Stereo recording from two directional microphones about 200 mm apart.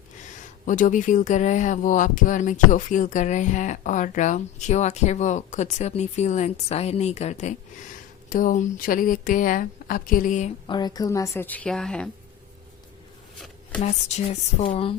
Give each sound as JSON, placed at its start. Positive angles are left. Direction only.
{"t": 0.6, "sound": "speech", "side_deg": 40}
{"t": 10.7, "sound": "a woman's voice", "side_deg": 20}
{"t": 13.8, "sound": "speech", "side_deg": 30}